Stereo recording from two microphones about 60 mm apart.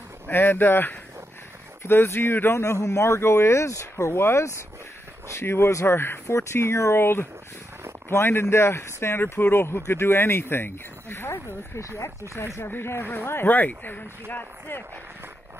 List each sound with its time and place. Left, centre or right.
0.3 s speech: left
2.6 s speech: left
12.5 s speech: left